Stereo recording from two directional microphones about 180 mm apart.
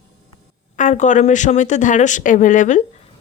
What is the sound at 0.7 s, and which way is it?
A woman's voice, 45° left (ahead or behind).